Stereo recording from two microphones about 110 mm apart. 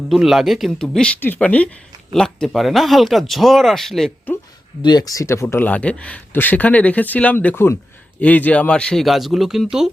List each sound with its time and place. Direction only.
0.1 s speech: 5° right (ahead or behind)
4.8 s speech: 40° left (ahead or behind); by 5.6 s 25° left (ahead or behind)
5.6 s speech: 10° left (ahead or behind); by 9.9 s 5° right (ahead or behind)